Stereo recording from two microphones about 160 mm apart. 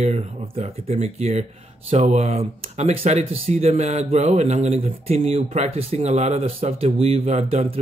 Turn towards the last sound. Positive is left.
turn(degrees=-40)  # may be behind; listen again after turning